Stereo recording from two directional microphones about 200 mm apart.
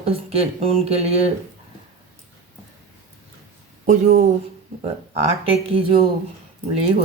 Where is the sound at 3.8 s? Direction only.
35° right (ahead or behind).